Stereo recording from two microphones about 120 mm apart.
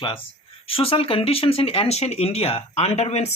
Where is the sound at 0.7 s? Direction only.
55° left (ahead or behind).